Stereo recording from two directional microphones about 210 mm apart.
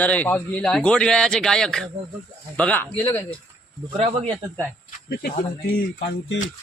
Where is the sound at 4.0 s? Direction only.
30° right (ahead or behind).